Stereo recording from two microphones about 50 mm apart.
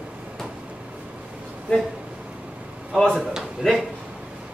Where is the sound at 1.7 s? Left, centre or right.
Left.